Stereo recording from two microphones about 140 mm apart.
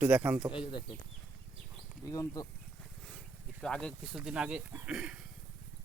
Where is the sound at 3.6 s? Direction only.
5° left (ahead or behind).